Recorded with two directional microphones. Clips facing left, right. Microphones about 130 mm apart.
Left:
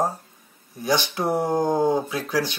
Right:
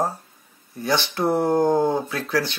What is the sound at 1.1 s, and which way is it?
Speech, 15° left (ahead or behind).